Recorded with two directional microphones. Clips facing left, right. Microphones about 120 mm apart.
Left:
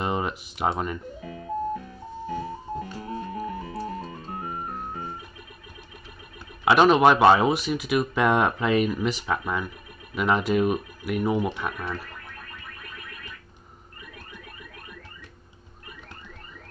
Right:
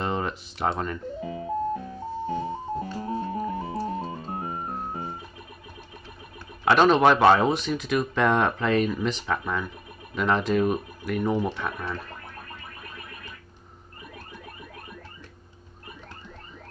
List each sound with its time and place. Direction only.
0.0 s a sound: 10° left (ahead or behind)
1.2 s music: 20° right (ahead or behind)
6.6 s speech: 10° left (ahead or behind)